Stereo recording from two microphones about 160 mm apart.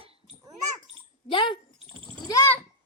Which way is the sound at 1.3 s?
30° left (ahead or behind).